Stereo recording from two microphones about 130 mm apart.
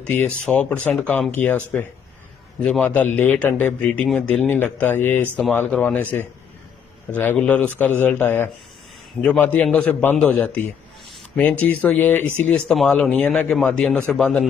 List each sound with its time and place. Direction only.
0.0 s a man's voice: 15° left (ahead or behind)